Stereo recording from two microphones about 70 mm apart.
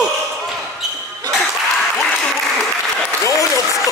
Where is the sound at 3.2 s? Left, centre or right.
Left.